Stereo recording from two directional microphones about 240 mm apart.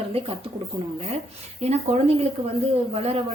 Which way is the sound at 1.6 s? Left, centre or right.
Right.